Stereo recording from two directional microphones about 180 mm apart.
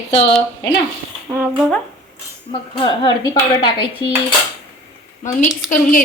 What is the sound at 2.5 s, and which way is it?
Speech, 30° left (ahead or behind).